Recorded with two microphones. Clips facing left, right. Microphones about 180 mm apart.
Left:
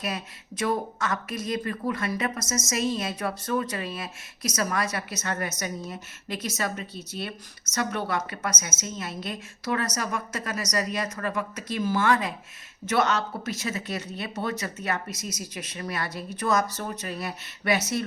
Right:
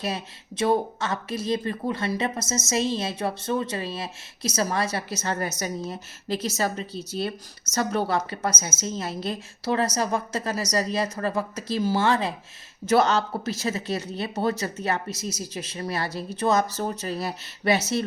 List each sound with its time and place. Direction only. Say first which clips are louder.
0.0 s speech: right 2 dB; 30° right (ahead or behind)